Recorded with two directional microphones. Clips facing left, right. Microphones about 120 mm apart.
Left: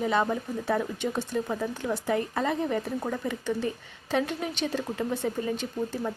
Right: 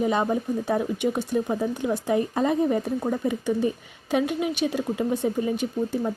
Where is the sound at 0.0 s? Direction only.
20° right (ahead or behind).